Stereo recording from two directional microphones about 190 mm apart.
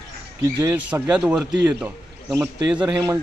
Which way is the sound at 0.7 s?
10° right (ahead or behind).